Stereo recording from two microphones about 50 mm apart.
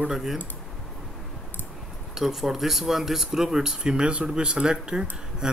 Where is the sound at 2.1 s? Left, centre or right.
Centre.